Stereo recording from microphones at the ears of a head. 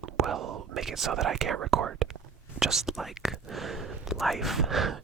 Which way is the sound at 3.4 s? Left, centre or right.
Right.